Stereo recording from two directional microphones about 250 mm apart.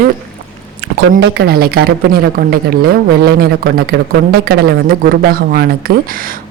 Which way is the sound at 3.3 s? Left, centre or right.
Right.